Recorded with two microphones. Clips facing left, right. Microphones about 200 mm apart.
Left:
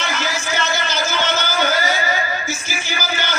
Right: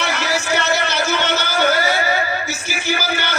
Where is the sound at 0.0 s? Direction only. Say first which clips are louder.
Right 3 dB; 65° right (ahead or behind).